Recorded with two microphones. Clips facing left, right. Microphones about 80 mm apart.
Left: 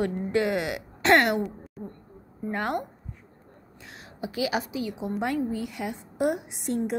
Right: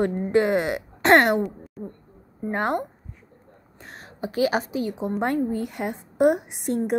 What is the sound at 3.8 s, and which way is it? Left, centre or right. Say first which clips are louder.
A woman's voice: right 3 dB; right.